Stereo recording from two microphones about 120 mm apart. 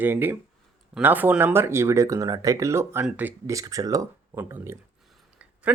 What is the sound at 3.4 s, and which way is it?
Speech, 25° right (ahead or behind).